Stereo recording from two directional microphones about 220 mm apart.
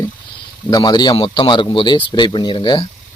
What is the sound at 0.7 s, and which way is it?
Speech, 20° left (ahead or behind).